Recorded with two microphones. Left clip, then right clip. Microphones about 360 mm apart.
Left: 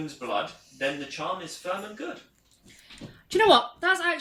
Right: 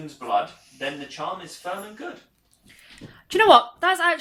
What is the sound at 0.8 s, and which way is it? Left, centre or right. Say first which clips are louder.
Speech: left 1 dB; centre.